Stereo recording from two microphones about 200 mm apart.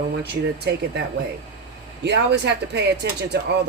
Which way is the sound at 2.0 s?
60° right (ahead or behind).